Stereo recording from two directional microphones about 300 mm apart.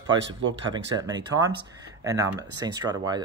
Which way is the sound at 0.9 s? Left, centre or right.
Centre.